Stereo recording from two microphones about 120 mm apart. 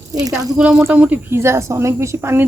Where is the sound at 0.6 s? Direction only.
10° right (ahead or behind).